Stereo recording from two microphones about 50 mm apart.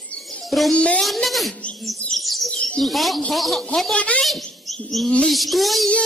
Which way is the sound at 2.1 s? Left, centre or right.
Centre.